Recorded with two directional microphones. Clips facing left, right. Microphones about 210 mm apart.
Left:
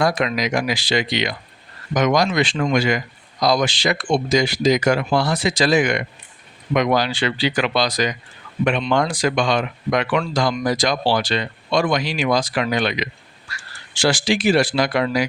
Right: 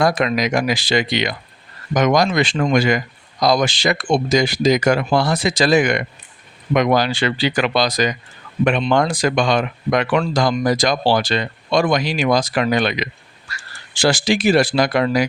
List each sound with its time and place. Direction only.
0.0 s speech: 50° right (ahead or behind)